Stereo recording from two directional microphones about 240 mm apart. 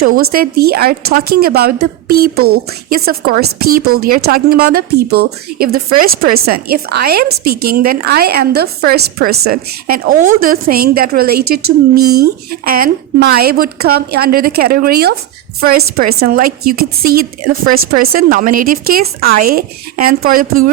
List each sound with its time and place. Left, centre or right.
0.0 s a woman's voice: right